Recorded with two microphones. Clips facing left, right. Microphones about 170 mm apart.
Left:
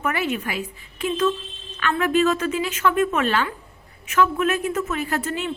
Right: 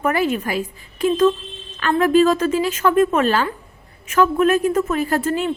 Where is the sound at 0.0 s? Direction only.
40° right (ahead or behind).